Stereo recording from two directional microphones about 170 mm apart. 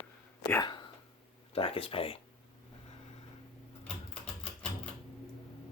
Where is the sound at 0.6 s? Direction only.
25° left (ahead or behind).